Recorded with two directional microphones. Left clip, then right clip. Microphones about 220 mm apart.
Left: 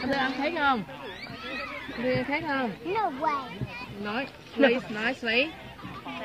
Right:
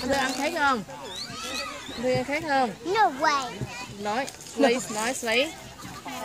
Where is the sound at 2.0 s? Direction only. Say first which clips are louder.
Right 2 dB; 15° left (ahead or behind).